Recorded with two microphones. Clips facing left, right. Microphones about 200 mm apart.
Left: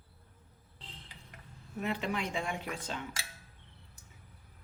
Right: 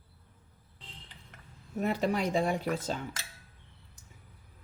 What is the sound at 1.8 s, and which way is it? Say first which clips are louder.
Speech: right 5 dB; 40° right (ahead or behind).